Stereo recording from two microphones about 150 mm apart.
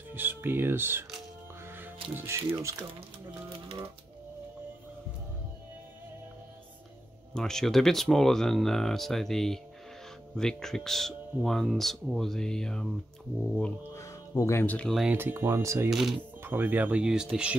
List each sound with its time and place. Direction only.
0.1 s speech: 15° right (ahead or behind)
2.2 s speech: 15° right (ahead or behind)
7.3 s speech: 5° left (ahead or behind)
13.9 s speech: 20° left (ahead or behind); by 15.0 s 5° left (ahead or behind)
15.0 s speech: 15° right (ahead or behind)
15.9 s speech: centre (ahead or behind)
16.2 s speech: 15° right (ahead or behind)